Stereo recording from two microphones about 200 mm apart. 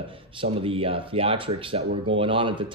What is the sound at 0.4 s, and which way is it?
A man's voice, 25° right (ahead or behind).